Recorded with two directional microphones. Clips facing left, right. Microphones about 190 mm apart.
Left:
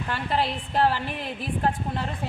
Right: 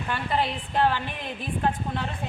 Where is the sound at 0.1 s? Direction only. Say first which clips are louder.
Even; centre (ahead or behind).